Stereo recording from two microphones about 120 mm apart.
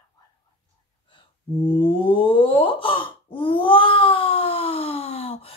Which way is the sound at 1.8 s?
45° left (ahead or behind).